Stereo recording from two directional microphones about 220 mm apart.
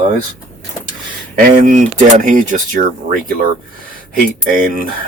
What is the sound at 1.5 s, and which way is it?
Speech, 35° right (ahead or behind).